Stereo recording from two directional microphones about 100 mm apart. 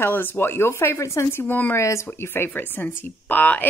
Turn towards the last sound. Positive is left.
turn(degrees=15)  # may be behind; listen again after turning